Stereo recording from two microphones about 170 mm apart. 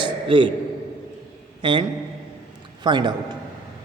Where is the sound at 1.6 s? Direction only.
30° right (ahead or behind).